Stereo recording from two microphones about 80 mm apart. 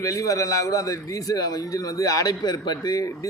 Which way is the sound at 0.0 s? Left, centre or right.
Left.